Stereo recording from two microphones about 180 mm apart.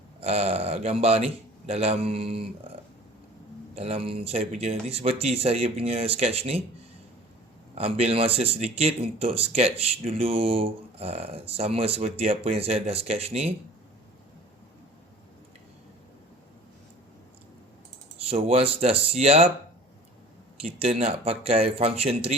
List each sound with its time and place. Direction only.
0.2 s speech: 35° right (ahead or behind)
3.8 s speech: 30° right (ahead or behind)
7.8 s speech: 35° right (ahead or behind)
18.4 s speech: 30° right (ahead or behind)
20.6 s speech: 30° right (ahead or behind)